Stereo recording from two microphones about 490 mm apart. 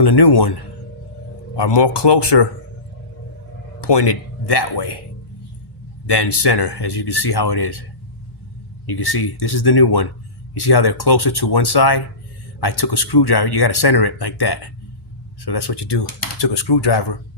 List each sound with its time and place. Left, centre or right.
0.0 s speech: left
3.8 s speech: left
6.1 s speech: left
8.9 s speech: left